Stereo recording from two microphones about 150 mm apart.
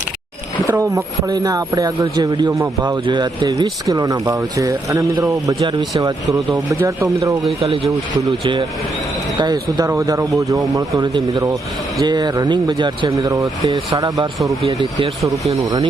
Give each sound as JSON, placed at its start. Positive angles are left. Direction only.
{"t": 0.7, "sound": "speech", "side_deg": -20}
{"t": 7.6, "sound": "speech", "side_deg": -40}
{"t": 9.4, "sound": "speech", "side_deg": -25}
{"t": 15.6, "sound": "speech", "side_deg": -25}